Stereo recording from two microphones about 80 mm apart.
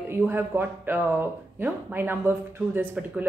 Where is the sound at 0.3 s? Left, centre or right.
Right.